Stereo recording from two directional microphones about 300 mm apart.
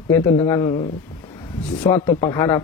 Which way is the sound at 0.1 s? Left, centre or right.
Centre.